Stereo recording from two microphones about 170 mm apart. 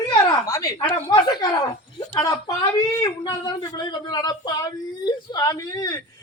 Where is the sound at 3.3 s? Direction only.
25° left (ahead or behind).